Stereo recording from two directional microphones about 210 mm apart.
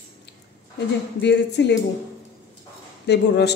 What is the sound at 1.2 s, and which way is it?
Speech, 55° left (ahead or behind).